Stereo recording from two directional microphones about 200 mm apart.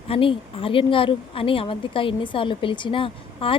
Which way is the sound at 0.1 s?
25° left (ahead or behind).